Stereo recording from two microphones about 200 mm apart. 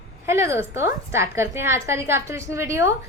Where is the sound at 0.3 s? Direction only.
15° right (ahead or behind).